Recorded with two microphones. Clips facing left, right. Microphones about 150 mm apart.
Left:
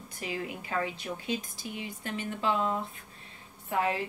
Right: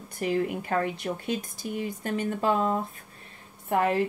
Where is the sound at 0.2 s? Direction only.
55° right (ahead or behind).